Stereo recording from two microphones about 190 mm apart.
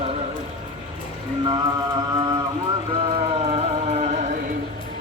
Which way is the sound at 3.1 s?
30° right (ahead or behind).